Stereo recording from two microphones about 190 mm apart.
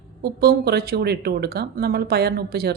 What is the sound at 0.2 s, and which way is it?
Speech, 55° right (ahead or behind).